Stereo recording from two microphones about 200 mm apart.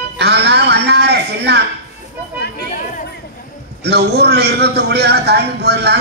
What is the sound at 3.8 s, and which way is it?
A man's voice, 55° right (ahead or behind).